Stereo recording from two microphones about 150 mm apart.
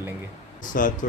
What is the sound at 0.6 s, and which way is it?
Speech, 65° left (ahead or behind).